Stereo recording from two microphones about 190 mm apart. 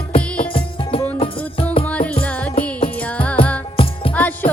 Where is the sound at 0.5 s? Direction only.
30° left (ahead or behind).